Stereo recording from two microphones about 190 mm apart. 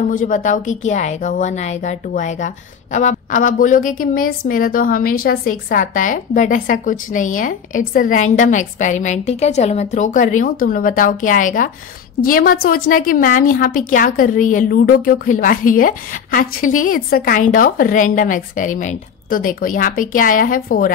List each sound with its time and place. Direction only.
0.1 s a woman's voice: 45° left (ahead or behind)